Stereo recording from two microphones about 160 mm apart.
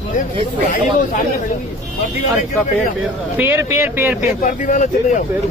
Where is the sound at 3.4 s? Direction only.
15° right (ahead or behind).